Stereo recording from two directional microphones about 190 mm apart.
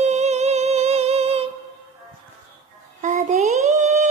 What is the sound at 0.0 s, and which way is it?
Music, 35° right (ahead or behind).